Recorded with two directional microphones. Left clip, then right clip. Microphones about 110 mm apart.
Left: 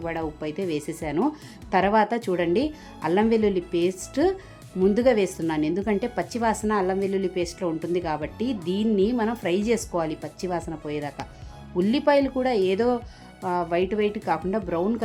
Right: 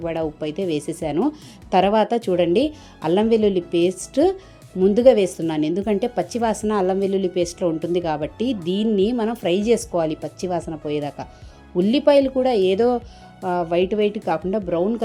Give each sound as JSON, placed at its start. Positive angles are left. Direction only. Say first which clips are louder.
{"t": 0.0, "sound": "a woman's voice", "louder": "right 5 dB", "side_deg": -30}